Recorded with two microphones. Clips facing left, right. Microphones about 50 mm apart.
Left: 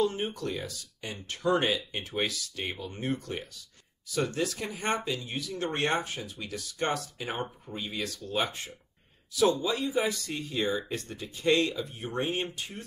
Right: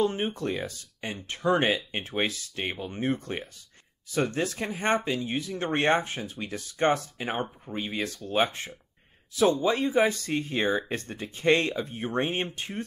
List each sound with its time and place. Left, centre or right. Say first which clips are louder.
0.0 s speech: right 2 dB; right